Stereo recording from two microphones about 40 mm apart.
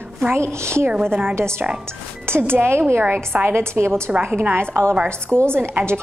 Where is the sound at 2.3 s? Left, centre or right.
Right.